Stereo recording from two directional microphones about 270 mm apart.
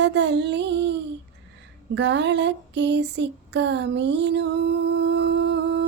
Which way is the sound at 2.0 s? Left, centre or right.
Right.